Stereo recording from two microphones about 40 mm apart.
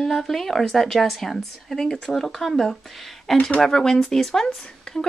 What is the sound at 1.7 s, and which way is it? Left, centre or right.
Speech, centre.